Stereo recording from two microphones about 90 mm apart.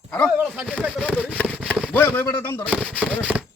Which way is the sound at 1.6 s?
15° left (ahead or behind).